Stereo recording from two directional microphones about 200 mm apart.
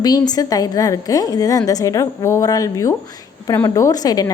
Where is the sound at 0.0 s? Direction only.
20° left (ahead or behind).